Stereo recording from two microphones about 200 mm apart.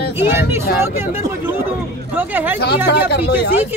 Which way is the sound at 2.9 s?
55° left (ahead or behind).